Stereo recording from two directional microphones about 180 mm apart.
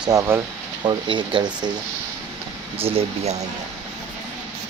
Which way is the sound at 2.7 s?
30° right (ahead or behind).